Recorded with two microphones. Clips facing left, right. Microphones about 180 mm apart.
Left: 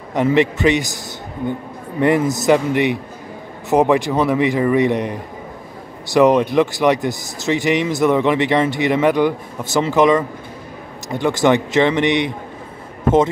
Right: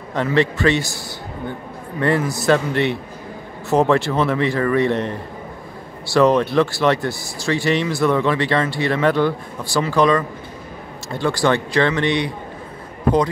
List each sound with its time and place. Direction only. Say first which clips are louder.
0.1 s a man's voice: left 3 dB; 15° left (ahead or behind)